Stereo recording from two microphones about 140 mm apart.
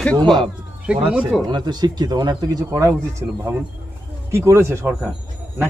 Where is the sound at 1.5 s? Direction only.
30° right (ahead or behind).